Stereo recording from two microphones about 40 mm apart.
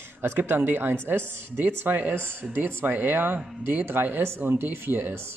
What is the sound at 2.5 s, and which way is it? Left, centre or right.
Speech, right.